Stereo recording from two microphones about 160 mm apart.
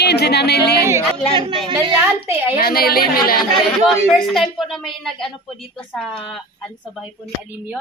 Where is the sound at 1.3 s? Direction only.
30° right (ahead or behind).